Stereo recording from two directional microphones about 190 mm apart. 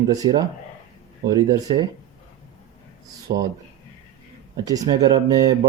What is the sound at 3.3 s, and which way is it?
Speech, 25° right (ahead or behind).